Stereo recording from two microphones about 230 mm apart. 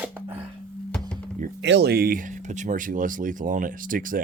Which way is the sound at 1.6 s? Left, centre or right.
Right.